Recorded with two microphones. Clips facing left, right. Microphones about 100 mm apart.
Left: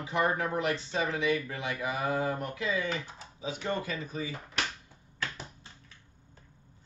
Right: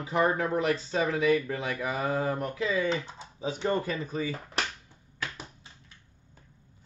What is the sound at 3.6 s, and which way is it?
Speech, 40° right (ahead or behind).